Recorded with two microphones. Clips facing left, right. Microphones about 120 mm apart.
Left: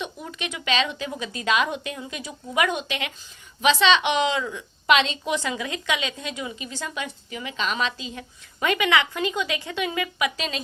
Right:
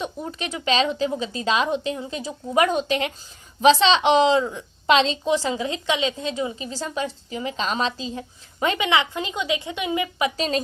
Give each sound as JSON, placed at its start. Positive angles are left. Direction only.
{"t": 0.0, "sound": "a woman's voice", "side_deg": -35}